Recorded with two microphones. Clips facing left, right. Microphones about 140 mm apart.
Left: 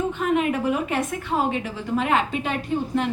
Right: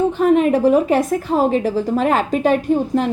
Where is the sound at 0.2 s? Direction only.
35° right (ahead or behind).